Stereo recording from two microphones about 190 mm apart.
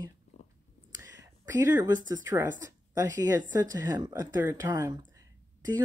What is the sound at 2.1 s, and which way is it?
Speech, 20° right (ahead or behind).